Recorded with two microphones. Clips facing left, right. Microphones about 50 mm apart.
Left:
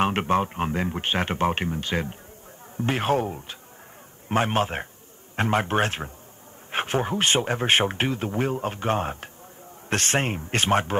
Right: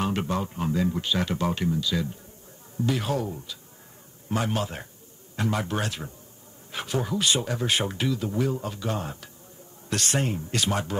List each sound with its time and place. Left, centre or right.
0.0 s speech: left